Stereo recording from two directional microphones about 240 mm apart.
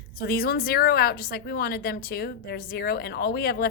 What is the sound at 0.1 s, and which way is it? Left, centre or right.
A woman's voice, left.